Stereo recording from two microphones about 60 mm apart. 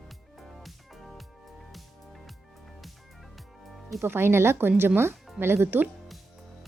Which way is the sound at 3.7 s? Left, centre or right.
Centre.